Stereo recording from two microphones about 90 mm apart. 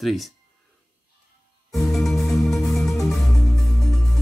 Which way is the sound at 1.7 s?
Centre (ahead or behind).